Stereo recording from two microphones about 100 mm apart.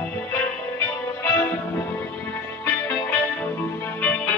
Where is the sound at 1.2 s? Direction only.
20° left (ahead or behind).